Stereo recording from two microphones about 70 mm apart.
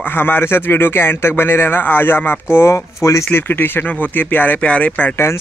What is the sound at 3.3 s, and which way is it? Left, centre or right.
Speech, left.